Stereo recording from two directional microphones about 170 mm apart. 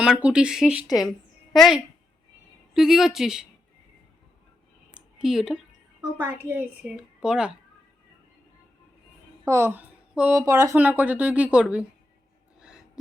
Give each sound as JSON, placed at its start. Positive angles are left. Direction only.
{"t": 0.0, "sound": "a woman's voice", "side_deg": -5}
{"t": 4.9, "sound": "a sound", "side_deg": -5}
{"t": 6.1, "sound": "a woman's voice", "side_deg": -10}
{"t": 9.4, "sound": "speech", "side_deg": -15}
{"t": 10.4, "sound": "speech", "side_deg": -20}
{"t": 10.8, "sound": "a woman's voice", "side_deg": -10}
{"t": 12.5, "sound": "a sound", "side_deg": -5}